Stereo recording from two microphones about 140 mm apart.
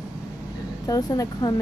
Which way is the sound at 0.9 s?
25° left (ahead or behind).